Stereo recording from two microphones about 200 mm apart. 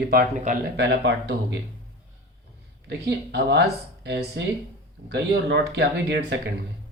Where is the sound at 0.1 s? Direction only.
50° right (ahead or behind).